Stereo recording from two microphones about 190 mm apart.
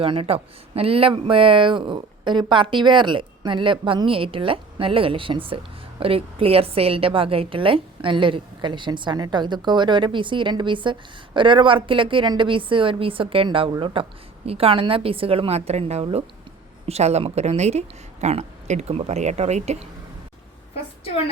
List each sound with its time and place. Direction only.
0.0 s a woman's voice: 30° right (ahead or behind)